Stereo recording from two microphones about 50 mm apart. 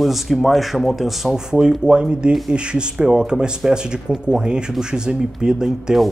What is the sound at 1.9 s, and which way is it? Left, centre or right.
Speech, centre.